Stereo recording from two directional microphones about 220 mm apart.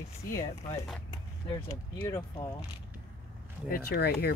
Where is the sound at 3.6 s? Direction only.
45° left (ahead or behind).